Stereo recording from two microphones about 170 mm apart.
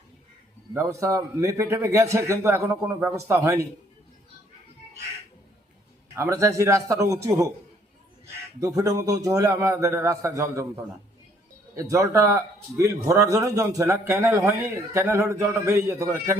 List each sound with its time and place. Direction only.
0.7 s a man's voice: 15° right (ahead or behind)
6.1 s a man's voice: 15° right (ahead or behind)
8.6 s a man's voice: 20° right (ahead or behind)
11.7 s a man's voice: 20° right (ahead or behind)